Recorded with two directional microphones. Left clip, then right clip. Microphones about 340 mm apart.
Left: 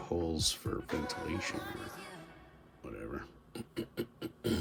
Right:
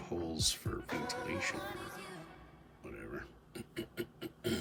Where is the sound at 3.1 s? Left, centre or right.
Centre.